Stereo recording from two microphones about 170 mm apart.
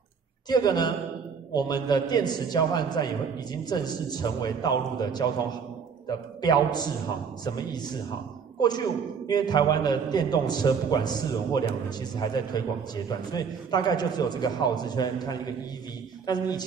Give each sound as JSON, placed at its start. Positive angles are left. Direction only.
{"t": 0.5, "sound": "a man's voice", "side_deg": 25}